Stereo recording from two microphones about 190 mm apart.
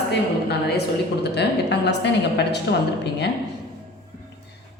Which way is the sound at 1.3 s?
65° left (ahead or behind).